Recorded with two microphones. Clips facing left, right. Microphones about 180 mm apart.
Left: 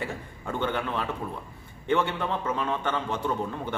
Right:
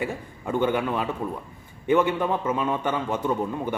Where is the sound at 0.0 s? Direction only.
10° right (ahead or behind).